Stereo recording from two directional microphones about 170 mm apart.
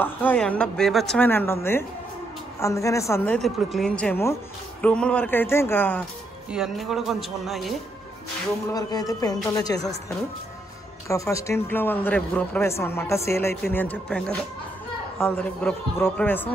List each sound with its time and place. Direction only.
0.0 s speech: 10° left (ahead or behind)
3.3 s a man's voice: centre (ahead or behind)
4.0 s speech: 15° left (ahead or behind)
6.5 s a man's voice: 5° right (ahead or behind)
8.6 s speech: 20° left (ahead or behind)
11.1 s speech: 20° left (ahead or behind)